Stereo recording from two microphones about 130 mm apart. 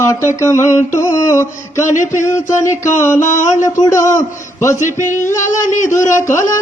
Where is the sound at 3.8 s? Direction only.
25° left (ahead or behind).